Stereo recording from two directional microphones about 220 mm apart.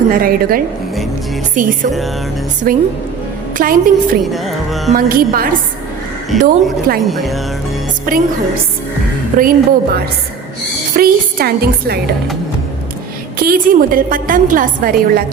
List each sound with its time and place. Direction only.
0.2 s a woman's voice: 40° right (ahead or behind)
4.2 s music: centre (ahead or behind)
4.9 s a woman's voice: 40° right (ahead or behind)
7.0 s speech: centre (ahead or behind)
8.1 s a woman's voice: 40° right (ahead or behind)
9.4 s a woman's voice: 40° right (ahead or behind)
13.4 s a woman's voice: 40° right (ahead or behind)